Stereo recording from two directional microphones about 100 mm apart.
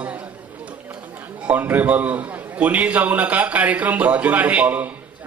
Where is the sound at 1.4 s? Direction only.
20° right (ahead or behind).